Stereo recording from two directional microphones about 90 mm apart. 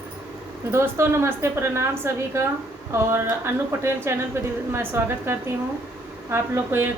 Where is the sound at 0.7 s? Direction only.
30° right (ahead or behind).